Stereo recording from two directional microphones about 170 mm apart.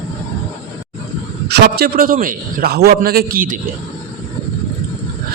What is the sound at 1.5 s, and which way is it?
A man's voice, 65° right (ahead or behind).